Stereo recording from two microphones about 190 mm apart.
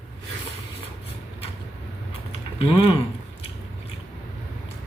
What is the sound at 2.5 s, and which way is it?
Speech, 30° left (ahead or behind).